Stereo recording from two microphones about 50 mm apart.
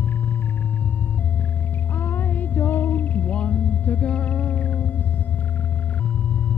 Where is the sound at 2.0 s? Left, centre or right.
Left.